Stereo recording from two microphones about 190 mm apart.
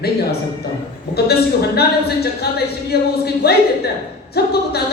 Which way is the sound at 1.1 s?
55° left (ahead or behind).